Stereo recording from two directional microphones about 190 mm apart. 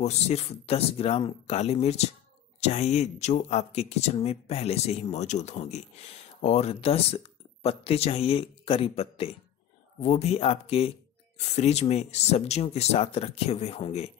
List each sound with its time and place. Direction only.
0.0 s speech: 35° left (ahead or behind)